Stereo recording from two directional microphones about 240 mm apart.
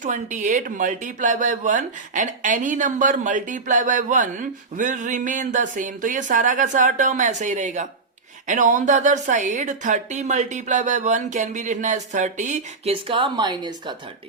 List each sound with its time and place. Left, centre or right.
0.0 s speech: right